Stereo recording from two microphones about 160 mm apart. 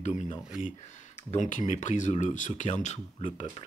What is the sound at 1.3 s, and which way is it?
Speech, 50° left (ahead or behind).